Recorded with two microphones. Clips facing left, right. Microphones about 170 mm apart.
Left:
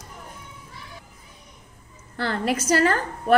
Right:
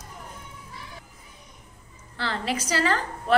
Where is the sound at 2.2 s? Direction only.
50° left (ahead or behind).